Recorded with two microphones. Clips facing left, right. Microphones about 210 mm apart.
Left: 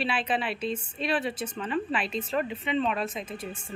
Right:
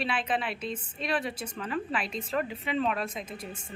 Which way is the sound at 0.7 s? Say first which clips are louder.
Left 1 dB; centre (ahead or behind).